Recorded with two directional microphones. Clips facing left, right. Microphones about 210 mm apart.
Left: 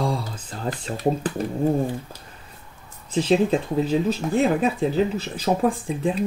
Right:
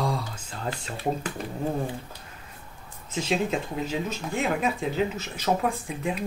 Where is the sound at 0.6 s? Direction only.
35° left (ahead or behind).